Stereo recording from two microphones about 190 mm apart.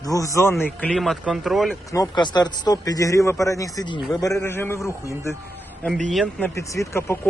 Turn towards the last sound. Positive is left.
turn(degrees=15)  # may be behind; listen again after turning